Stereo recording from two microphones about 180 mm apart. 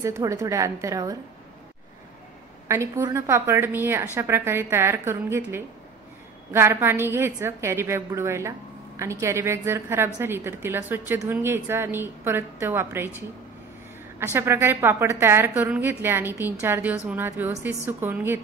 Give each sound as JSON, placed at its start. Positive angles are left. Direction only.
{"t": 0.0, "sound": "a woman's voice", "side_deg": -15}
{"t": 2.7, "sound": "a woman's voice", "side_deg": -15}
{"t": 14.2, "sound": "a woman's voice", "side_deg": -15}